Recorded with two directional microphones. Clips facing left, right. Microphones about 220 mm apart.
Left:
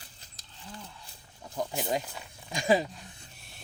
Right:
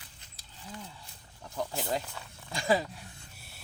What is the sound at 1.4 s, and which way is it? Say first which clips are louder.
Speech: left 2 dB; 15° left (ahead or behind).